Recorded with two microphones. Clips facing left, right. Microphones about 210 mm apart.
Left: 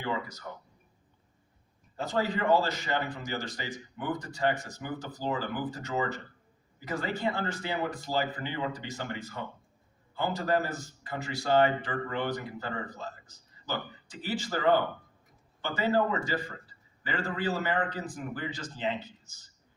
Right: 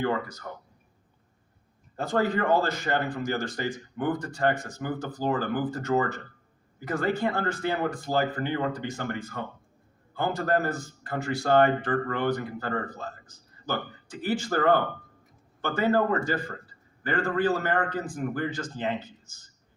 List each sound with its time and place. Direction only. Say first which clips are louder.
0.0 s speech: right 6 dB; 50° right (ahead or behind)
2.0 s speech: right 4 dB; 50° right (ahead or behind)